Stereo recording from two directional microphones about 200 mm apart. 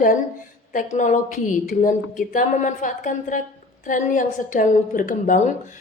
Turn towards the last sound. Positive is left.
turn(degrees=40)  # may be behind; listen again after turning